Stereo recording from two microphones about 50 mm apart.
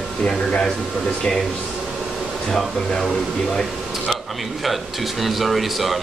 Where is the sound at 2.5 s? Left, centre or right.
Centre.